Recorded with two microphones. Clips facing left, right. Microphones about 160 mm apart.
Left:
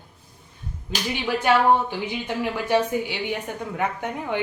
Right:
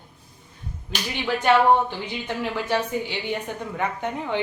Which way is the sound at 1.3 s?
10° left (ahead or behind).